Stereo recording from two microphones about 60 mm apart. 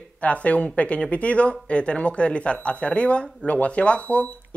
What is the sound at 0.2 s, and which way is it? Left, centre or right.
Speech, left.